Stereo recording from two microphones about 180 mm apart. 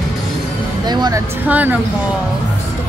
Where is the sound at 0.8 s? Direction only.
25° right (ahead or behind).